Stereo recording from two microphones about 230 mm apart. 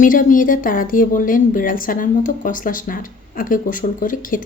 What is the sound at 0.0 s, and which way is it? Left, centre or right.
A woman's voice, left.